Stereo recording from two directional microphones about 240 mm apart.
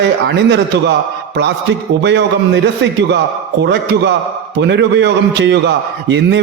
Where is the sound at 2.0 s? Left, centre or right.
Right.